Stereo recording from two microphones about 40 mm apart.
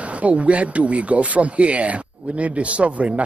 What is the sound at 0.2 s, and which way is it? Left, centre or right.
Speech, right.